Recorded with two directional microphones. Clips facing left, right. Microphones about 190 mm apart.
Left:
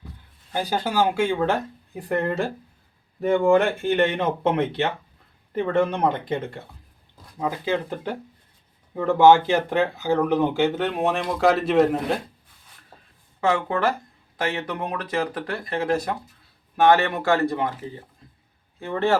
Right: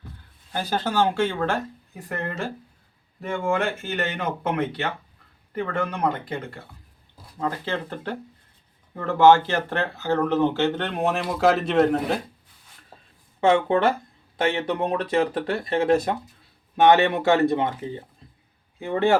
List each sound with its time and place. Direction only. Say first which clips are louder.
0.5 s speech: left 1 dB; 15° left (ahead or behind)
3.4 s speech: left 5 dB; 35° left (ahead or behind)
7.3 s speech: left 3 dB; 10° left (ahead or behind)
13.4 s speech: right 3 dB; 25° right (ahead or behind)